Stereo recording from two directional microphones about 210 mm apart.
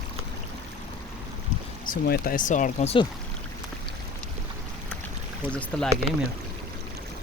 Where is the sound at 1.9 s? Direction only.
45° left (ahead or behind); by 3.1 s 30° left (ahead or behind).